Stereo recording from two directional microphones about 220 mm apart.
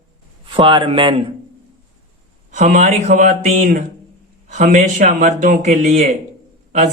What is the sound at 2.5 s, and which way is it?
A man's voice, 35° right (ahead or behind).